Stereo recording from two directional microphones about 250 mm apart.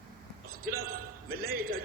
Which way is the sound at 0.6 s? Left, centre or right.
Right.